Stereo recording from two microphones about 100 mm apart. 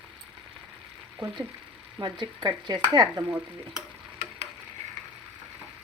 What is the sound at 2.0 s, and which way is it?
Speech, 50° right (ahead or behind).